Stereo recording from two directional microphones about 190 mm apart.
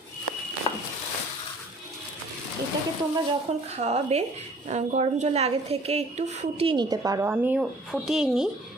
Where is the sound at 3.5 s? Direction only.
35° right (ahead or behind).